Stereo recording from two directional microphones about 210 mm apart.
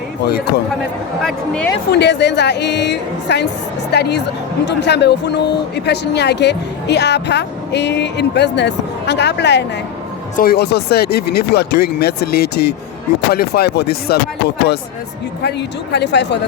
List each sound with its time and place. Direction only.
0.3 s speech: 50° left (ahead or behind)
1.2 s speech: 5° left (ahead or behind)
1.9 s speech: 55° left (ahead or behind)